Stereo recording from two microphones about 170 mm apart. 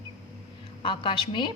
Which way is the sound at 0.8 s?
30° left (ahead or behind).